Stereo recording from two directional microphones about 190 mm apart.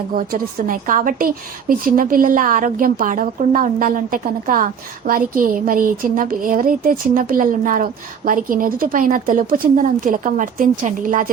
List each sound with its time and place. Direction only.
0.2 s a woman's voice: 45° right (ahead or behind)